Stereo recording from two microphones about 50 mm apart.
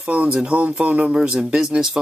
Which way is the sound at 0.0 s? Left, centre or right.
Right.